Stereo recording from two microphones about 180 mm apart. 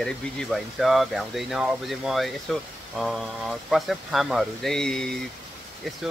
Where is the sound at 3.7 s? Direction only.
Centre (ahead or behind).